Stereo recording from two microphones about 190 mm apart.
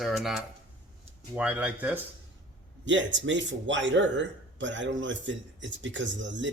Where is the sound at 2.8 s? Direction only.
75° right (ahead or behind).